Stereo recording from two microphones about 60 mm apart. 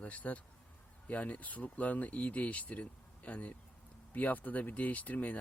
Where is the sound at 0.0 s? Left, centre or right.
Left.